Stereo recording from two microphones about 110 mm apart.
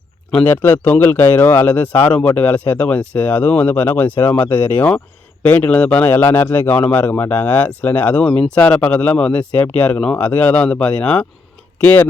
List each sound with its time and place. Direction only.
0.5 s speech: 15° left (ahead or behind)